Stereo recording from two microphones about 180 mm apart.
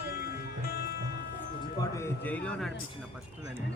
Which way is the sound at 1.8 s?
15° left (ahead or behind).